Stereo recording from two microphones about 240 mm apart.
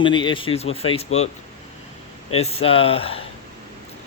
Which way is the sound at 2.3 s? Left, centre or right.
Left.